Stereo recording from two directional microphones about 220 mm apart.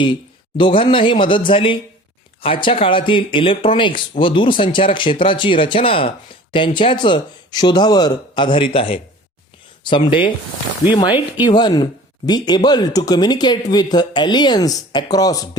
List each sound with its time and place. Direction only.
0.0 s speech: 20° left (ahead or behind)